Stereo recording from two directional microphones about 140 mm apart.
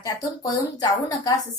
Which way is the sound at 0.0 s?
30° left (ahead or behind).